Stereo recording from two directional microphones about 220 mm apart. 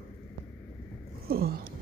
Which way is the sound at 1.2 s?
45° right (ahead or behind).